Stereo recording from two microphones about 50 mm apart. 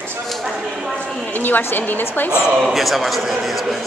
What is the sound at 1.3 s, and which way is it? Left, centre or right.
A woman's voice, left.